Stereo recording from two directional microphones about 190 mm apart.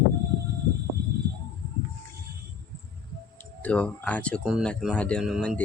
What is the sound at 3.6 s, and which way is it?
Speech, 5° left (ahead or behind).